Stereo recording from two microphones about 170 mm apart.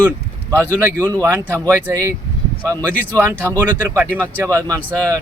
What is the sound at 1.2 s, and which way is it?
A man's voice, 15° right (ahead or behind).